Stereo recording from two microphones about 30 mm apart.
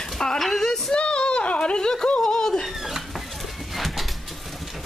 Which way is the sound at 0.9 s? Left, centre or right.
Left.